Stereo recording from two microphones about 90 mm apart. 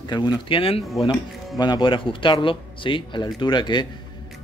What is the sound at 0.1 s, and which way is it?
Speech, 65° left (ahead or behind).